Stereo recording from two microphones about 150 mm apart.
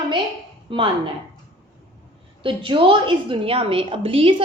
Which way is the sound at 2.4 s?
35° right (ahead or behind).